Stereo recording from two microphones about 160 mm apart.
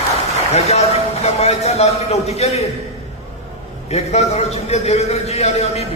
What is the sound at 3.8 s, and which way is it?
Speech, 40° left (ahead or behind).